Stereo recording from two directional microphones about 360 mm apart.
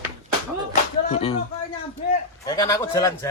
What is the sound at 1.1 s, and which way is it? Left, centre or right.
Speech, centre.